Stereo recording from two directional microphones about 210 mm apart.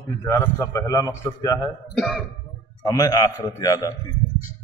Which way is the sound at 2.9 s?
20° left (ahead or behind).